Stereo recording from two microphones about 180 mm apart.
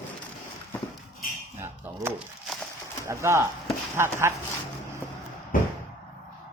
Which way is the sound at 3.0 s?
15° right (ahead or behind).